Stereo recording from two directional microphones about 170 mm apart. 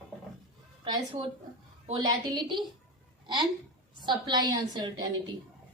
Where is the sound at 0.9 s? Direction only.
30° right (ahead or behind).